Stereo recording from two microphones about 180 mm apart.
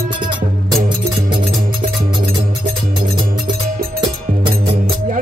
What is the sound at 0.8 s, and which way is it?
Music, 50° right (ahead or behind).